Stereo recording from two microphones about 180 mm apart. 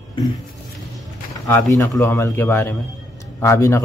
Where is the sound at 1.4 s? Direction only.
15° left (ahead or behind).